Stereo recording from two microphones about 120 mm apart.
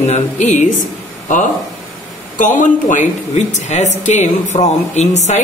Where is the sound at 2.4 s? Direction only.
90° left; by 5.4 s 70° left (ahead or behind).